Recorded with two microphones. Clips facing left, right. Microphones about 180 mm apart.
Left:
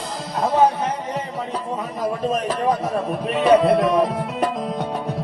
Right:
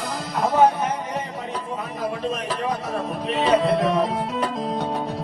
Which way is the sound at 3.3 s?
55° left (ahead or behind).